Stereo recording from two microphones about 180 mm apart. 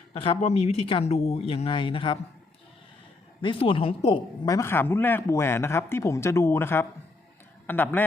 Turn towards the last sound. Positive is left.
turn(degrees=10)  # may be behind; listen again after turning